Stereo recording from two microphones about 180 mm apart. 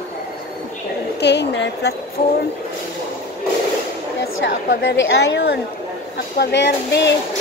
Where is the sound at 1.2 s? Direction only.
70° left (ahead or behind).